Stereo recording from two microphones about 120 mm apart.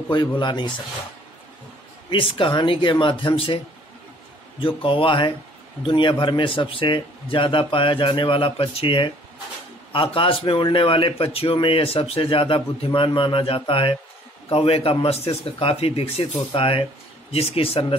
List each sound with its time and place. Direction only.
0.1 s speech: 40° left (ahead or behind)
2.0 s speech: 45° left (ahead or behind)